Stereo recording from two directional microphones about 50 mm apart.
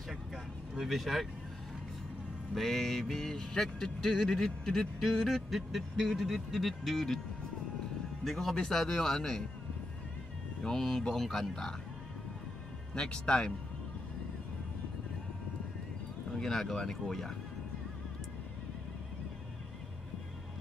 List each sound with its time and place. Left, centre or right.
0.1 s vehicle: centre
2.5 s music: centre
5.7 s speech: centre
8.2 s speech: centre
8.5 s music: centre
10.6 s music: centre
12.9 s music: centre
16.3 s music: centre